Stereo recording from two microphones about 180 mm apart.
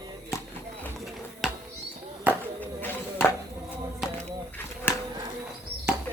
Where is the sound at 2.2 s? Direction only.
10° right (ahead or behind).